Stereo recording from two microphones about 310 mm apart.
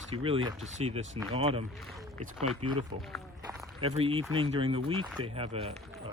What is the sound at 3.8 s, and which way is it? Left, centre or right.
Speech, centre.